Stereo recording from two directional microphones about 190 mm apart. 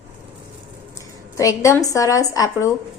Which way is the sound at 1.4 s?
15° left (ahead or behind).